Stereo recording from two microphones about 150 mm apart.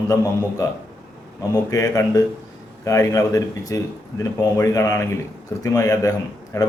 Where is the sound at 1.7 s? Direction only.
25° left (ahead or behind).